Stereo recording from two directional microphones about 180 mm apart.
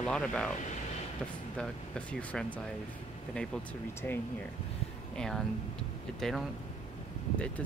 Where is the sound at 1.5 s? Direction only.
5° left (ahead or behind).